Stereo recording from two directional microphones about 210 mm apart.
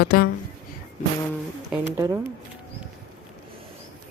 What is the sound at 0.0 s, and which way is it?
Speech, 45° left (ahead or behind).